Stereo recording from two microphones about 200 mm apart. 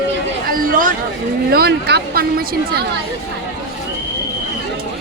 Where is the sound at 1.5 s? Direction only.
50° right (ahead or behind).